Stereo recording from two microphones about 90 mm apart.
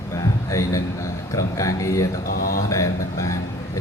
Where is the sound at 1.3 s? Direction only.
35° left (ahead or behind).